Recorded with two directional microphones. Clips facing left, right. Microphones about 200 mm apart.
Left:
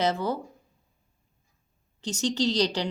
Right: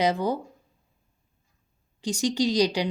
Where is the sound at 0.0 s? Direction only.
15° right (ahead or behind).